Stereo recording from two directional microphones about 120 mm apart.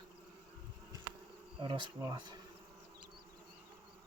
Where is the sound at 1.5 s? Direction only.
45° right (ahead or behind).